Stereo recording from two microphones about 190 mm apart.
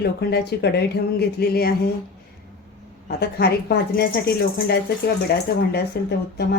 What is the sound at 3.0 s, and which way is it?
A woman's voice, 55° left (ahead or behind).